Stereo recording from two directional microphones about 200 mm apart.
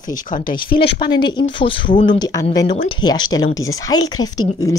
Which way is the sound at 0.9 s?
20° left (ahead or behind).